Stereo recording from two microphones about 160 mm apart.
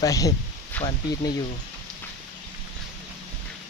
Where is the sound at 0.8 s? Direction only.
10° left (ahead or behind).